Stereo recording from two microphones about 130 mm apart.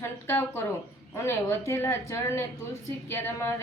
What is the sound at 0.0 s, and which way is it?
A woman's voice, 20° left (ahead or behind).